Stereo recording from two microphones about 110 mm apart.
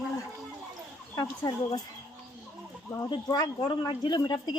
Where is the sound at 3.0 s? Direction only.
40° left (ahead or behind).